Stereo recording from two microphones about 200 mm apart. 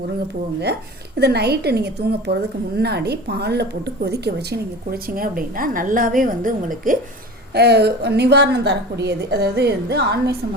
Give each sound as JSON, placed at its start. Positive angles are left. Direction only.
{"t": 1.2, "sound": "a woman's voice", "side_deg": -55}
{"t": 7.5, "sound": "a woman's voice", "side_deg": -55}